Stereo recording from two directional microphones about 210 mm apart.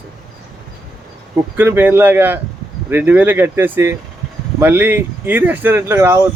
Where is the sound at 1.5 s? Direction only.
10° right (ahead or behind).